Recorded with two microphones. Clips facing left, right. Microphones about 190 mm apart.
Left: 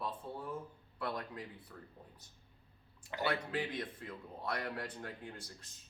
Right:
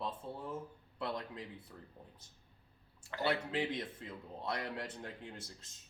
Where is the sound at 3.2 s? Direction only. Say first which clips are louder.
Right 2 dB; 25° right (ahead or behind).